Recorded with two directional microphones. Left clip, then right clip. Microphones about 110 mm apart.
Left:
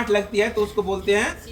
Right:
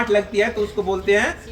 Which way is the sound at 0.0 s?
30° right (ahead or behind).